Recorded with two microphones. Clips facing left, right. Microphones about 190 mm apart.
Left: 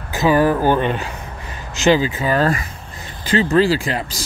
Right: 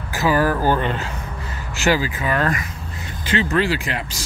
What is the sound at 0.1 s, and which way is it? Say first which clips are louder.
Speech: left 4 dB; 20° left (ahead or behind).